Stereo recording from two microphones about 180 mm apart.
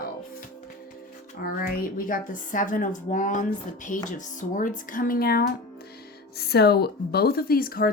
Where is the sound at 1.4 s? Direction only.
55° left (ahead or behind).